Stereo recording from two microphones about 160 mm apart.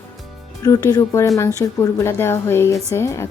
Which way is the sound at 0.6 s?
20° left (ahead or behind).